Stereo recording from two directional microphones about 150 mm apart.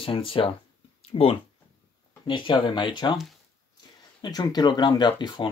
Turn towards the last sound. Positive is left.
turn(degrees=30)  # may be behind; listen again after turning